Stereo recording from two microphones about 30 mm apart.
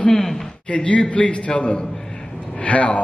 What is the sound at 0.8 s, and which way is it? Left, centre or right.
A man's voice, left.